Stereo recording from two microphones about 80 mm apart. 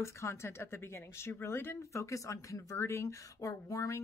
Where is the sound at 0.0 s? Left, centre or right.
Left.